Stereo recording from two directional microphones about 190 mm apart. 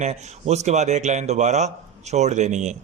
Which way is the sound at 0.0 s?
35° right (ahead or behind).